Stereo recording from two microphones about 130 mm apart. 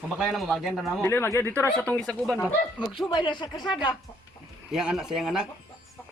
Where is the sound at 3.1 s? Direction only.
35° left (ahead or behind).